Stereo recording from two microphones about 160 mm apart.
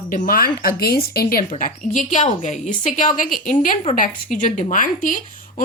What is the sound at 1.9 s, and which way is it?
A woman's voice, 45° left (ahead or behind).